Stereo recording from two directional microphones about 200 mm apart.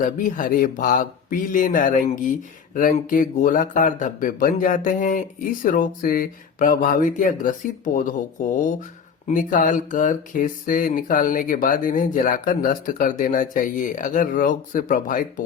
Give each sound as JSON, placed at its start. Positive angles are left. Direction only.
{"t": 0.2, "sound": "speech", "side_deg": 40}